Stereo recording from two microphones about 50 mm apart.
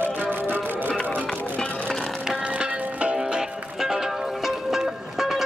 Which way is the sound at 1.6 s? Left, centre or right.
Centre.